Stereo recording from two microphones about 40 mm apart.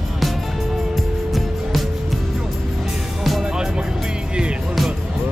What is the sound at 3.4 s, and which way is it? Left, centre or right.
Music, centre.